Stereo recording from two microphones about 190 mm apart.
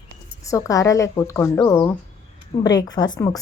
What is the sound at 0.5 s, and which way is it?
A woman's voice, 15° left (ahead or behind).